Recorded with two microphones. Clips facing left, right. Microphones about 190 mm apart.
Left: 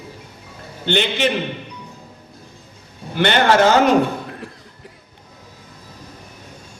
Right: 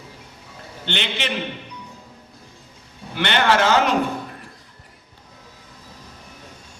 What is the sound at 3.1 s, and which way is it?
Speech, 45° left (ahead or behind).